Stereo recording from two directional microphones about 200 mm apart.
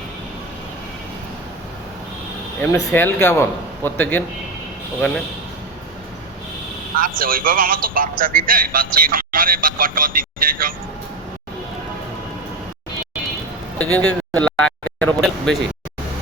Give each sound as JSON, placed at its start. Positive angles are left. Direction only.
{"t": 2.6, "sound": "speech", "side_deg": 10}
{"t": 6.9, "sound": "speech", "side_deg": -45}
{"t": 13.7, "sound": "speech", "side_deg": 5}